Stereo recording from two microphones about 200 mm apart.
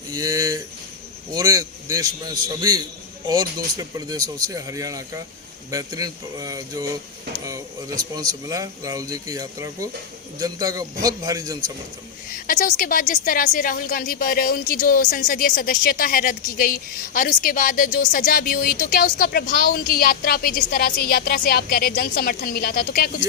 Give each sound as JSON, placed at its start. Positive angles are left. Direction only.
{"t": 0.1, "sound": "a sound", "side_deg": -15}
{"t": 1.4, "sound": "a man's voice", "side_deg": -20}
{"t": 12.3, "sound": "a woman's voice", "side_deg": 45}